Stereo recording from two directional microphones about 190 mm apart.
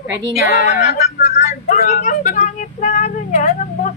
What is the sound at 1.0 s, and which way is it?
Speech, 35° left (ahead or behind).